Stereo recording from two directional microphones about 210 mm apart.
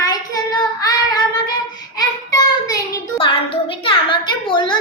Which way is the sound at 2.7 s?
25° left (ahead or behind).